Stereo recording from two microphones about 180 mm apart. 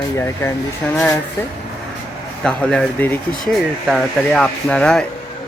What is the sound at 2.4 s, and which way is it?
Speech, 5° left (ahead or behind).